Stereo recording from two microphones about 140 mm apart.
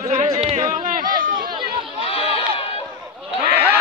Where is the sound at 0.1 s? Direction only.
55° right (ahead or behind).